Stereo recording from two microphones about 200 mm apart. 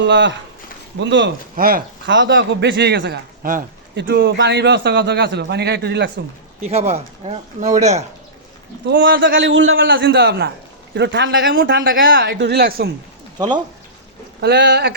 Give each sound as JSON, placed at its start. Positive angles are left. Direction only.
{"t": 0.0, "sound": "a man's voice", "side_deg": -60}
{"t": 1.5, "sound": "speech", "side_deg": -45}
{"t": 2.0, "sound": "a man's voice", "side_deg": -65}
{"t": 6.6, "sound": "speech", "side_deg": -35}
{"t": 8.9, "sound": "a man's voice", "side_deg": -55}
{"t": 9.2, "sound": "a man's voice", "side_deg": -65}
{"t": 14.4, "sound": "a man's voice", "side_deg": -55}